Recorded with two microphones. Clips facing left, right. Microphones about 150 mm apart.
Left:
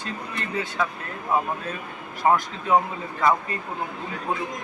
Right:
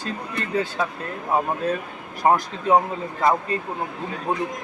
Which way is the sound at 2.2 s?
35° right (ahead or behind).